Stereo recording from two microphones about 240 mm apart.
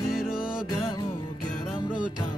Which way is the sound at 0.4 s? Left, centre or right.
Left.